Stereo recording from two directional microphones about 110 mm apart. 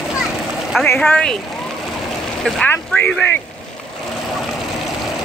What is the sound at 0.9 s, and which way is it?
Speech, 10° left (ahead or behind).